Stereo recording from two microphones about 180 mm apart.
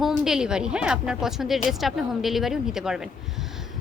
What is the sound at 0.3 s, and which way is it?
A woman's voice, 5° right (ahead or behind).